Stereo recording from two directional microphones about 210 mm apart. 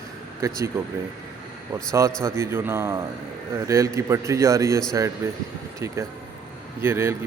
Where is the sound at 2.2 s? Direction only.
10° right (ahead or behind).